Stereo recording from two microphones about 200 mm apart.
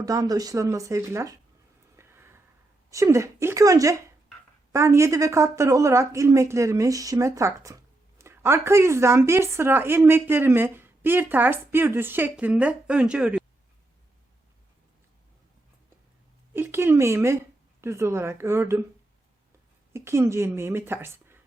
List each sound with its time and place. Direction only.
0.0 s speech: 20° right (ahead or behind)
2.0 s a sound: 10° right (ahead or behind)
2.9 s speech: 15° right (ahead or behind)
16.6 s speech: 10° right (ahead or behind)
19.9 s speech: 15° right (ahead or behind)